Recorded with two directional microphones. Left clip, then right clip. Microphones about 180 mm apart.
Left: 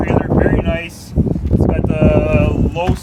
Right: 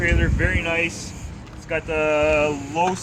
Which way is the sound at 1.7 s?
65° left (ahead or behind).